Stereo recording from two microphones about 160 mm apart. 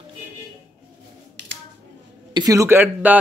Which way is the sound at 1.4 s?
90° right.